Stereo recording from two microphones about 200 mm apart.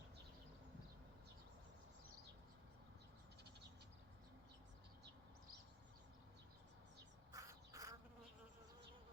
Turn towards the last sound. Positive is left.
turn(degrees=-15)  # may be behind; listen again after turning